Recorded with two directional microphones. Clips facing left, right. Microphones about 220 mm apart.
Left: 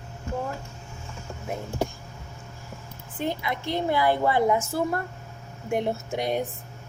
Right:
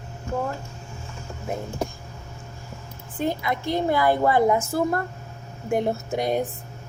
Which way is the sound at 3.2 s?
45° right (ahead or behind).